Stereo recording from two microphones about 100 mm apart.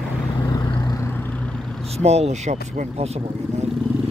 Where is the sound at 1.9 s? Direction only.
90° right.